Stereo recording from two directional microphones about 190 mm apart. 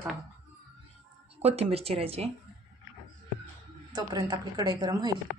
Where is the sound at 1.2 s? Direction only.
30° right (ahead or behind).